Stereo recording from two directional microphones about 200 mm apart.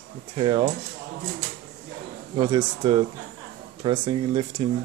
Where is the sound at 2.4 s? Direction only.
25° right (ahead or behind).